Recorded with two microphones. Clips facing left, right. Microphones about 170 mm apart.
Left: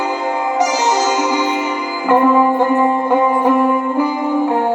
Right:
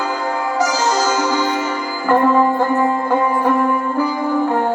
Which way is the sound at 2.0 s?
15° left (ahead or behind).